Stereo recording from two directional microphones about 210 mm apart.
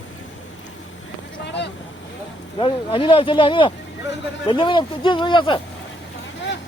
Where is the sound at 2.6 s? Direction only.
25° left (ahead or behind).